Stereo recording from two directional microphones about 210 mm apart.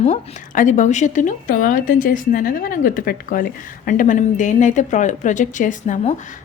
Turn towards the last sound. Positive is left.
turn(degrees=40)  # may be behind; listen again after turning